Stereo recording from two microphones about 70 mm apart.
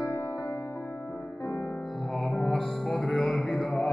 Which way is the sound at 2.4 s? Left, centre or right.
Centre.